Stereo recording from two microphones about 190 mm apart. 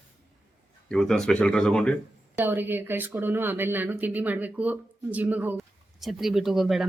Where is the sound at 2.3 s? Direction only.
10° right (ahead or behind).